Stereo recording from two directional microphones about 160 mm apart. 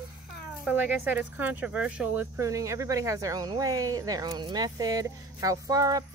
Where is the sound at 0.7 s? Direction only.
10° right (ahead or behind).